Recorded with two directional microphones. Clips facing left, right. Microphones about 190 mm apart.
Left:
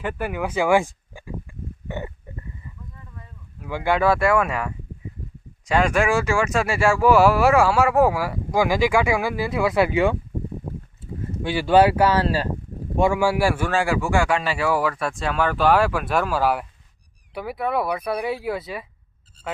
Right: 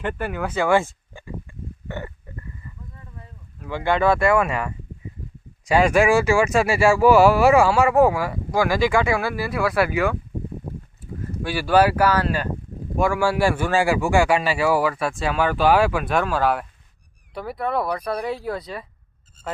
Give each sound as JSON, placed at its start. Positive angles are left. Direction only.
{"t": 0.0, "sound": "speech", "side_deg": 10}
{"t": 3.6, "sound": "speech", "side_deg": 10}
{"t": 8.5, "sound": "speech", "side_deg": 15}
{"t": 13.0, "sound": "speech", "side_deg": 20}